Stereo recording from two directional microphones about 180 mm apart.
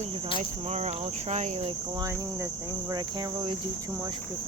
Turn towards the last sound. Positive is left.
turn(degrees=-25)  # may be behind; listen again after turning